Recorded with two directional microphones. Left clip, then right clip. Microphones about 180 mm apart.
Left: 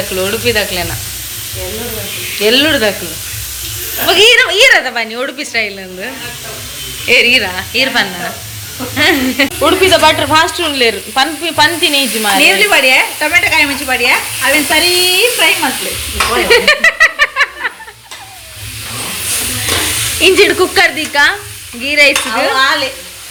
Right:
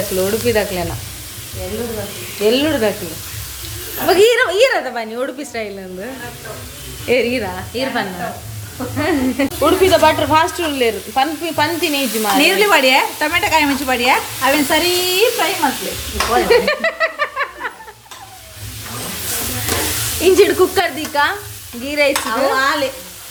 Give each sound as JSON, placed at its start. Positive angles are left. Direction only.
{"t": 0.2, "sound": "speech", "side_deg": -20}
{"t": 2.4, "sound": "speech", "side_deg": -5}
{"t": 4.0, "sound": "speech", "side_deg": -25}
{"t": 4.7, "sound": "speech", "side_deg": -10}
{"t": 7.1, "sound": "speech", "side_deg": -20}
{"t": 7.4, "sound": "speech", "side_deg": -10}
{"t": 9.0, "sound": "sizzle", "side_deg": -5}
{"t": 12.4, "sound": "speech", "side_deg": -65}
{"t": 16.3, "sound": "snicker", "side_deg": -15}
{"t": 20.2, "sound": "speech", "side_deg": -10}
{"t": 22.5, "sound": "speech", "side_deg": -60}